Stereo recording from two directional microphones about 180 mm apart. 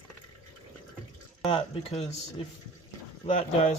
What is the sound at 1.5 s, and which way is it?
Speech, 35° left (ahead or behind).